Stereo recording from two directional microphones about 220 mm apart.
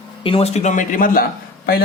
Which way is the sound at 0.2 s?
25° left (ahead or behind).